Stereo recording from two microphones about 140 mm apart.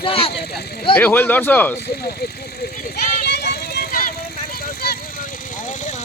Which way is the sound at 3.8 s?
90° left.